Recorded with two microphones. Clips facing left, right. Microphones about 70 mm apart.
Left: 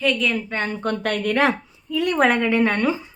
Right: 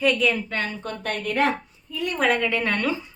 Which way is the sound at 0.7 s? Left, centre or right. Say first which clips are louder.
Left 8 dB; left.